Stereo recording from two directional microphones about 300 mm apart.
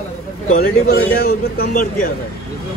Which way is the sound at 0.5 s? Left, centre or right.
Left.